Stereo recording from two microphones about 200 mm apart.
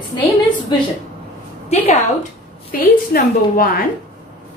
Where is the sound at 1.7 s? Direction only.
30° left (ahead or behind).